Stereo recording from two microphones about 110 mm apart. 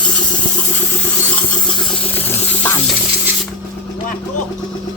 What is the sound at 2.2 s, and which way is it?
Water, 20° left (ahead or behind).